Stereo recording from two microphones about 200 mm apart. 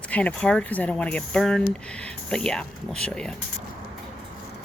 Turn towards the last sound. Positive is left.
turn(degrees=5)  # may be behind; listen again after turning